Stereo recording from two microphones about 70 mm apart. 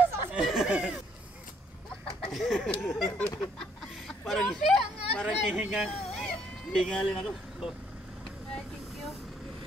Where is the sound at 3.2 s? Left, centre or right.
Centre.